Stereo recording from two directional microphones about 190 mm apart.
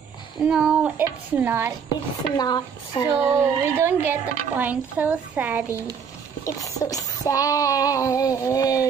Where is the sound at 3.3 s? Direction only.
15° right (ahead or behind).